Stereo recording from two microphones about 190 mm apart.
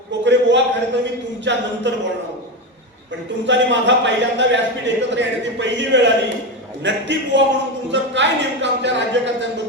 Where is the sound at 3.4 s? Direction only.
70° right (ahead or behind).